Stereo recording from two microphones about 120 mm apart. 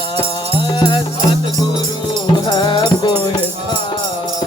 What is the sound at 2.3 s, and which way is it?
Music, 40° left (ahead or behind).